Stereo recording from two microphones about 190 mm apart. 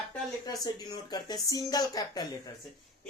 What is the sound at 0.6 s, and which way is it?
Speech, 20° left (ahead or behind).